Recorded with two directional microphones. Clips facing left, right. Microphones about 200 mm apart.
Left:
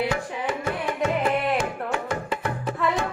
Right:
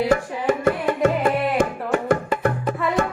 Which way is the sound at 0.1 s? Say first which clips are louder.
Right 7 dB; 45° right (ahead or behind).